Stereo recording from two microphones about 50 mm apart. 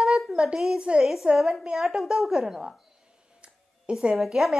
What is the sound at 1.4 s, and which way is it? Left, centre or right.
A woman's voice, centre.